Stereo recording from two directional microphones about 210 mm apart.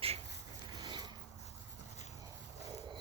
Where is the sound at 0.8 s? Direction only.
20° right (ahead or behind).